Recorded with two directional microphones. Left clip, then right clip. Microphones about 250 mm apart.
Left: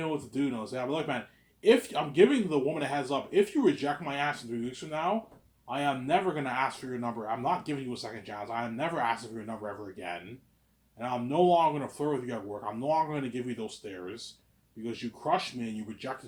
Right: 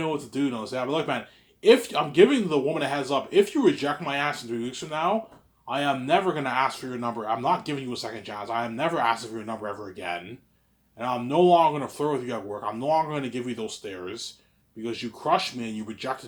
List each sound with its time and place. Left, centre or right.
0.3 s speech: right